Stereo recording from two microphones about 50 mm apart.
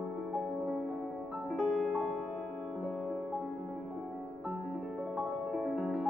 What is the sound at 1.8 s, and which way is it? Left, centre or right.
Music, centre.